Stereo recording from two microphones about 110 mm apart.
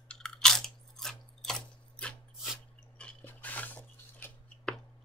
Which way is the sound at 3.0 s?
10° left (ahead or behind).